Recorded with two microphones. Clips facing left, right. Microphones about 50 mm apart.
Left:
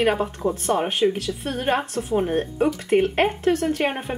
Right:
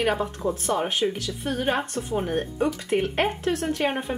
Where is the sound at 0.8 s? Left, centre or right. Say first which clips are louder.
Left 4 dB; centre.